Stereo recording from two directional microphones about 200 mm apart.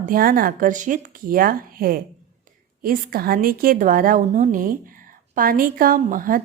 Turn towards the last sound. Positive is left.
turn(degrees=-45)  # may be behind; listen again after turning